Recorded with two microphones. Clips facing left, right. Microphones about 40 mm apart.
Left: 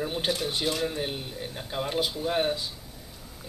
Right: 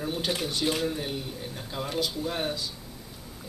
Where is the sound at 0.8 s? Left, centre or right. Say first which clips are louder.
Even; left.